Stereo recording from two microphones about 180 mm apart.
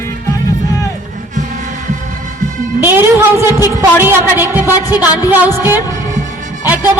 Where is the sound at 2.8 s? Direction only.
10° right (ahead or behind).